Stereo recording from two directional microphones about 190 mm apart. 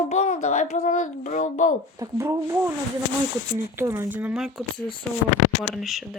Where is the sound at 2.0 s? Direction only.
15° right (ahead or behind).